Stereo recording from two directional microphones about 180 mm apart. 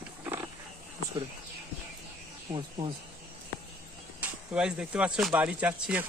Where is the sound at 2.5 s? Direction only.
30° right (ahead or behind).